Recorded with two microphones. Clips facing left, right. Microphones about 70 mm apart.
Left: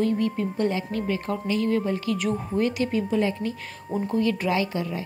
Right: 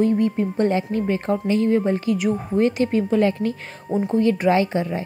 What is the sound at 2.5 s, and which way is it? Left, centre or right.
Speech, right.